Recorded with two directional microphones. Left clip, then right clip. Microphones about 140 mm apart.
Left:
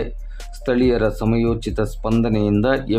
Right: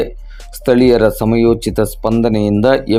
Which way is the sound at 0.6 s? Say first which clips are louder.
Right 8 dB; 30° right (ahead or behind).